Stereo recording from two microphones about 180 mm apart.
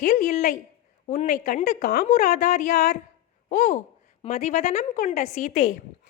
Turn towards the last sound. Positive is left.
turn(degrees=45)  # may be behind; listen again after turning